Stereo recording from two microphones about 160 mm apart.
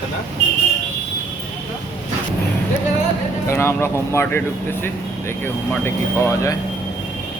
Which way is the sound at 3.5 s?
15° left (ahead or behind).